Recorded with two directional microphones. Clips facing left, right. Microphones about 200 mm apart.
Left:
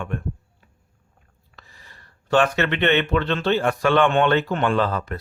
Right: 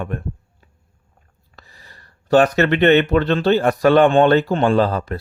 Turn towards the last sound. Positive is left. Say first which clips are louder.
# right 5 dB
turn(degrees=-35)  # may be behind; listen again after turning